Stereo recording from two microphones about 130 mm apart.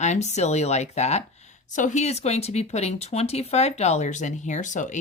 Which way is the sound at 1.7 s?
70° left (ahead or behind).